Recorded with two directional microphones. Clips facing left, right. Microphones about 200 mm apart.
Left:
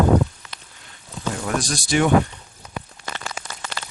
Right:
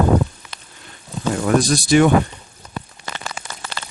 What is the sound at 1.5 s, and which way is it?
Speech, 60° right (ahead or behind).